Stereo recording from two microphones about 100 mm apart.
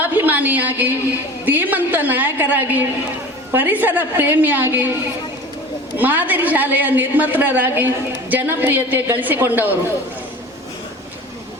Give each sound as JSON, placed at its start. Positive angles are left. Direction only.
{"t": 0.0, "sound": "a sound", "side_deg": -20}
{"t": 1.5, "sound": "a woman's voice", "side_deg": -20}
{"t": 6.0, "sound": "a woman's voice", "side_deg": -20}